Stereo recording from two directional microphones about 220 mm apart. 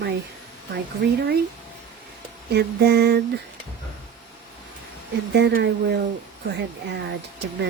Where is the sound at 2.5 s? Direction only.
45° right (ahead or behind).